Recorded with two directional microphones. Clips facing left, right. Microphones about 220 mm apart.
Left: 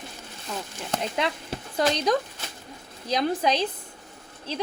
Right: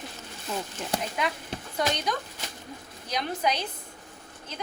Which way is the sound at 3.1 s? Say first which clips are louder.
Left 5 dB; 30° left (ahead or behind).